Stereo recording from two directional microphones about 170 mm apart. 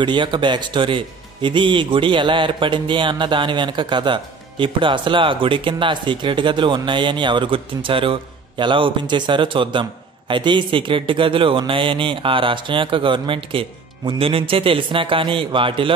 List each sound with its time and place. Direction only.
0.0 s speech: 30° right (ahead or behind)